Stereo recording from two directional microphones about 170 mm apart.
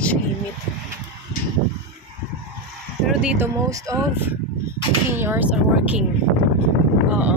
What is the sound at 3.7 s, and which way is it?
Speech, 20° right (ahead or behind).